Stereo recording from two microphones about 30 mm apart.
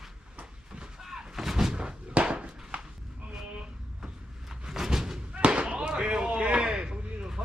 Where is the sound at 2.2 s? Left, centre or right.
Right.